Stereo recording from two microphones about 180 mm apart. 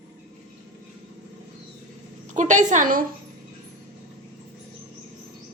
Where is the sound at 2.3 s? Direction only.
45° right (ahead or behind).